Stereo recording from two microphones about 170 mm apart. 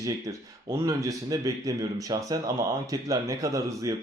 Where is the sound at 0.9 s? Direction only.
20° right (ahead or behind).